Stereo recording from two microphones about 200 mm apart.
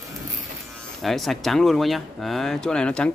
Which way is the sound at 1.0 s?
Centre (ahead or behind).